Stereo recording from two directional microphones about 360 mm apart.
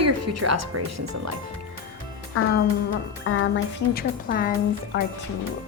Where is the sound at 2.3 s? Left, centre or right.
Left.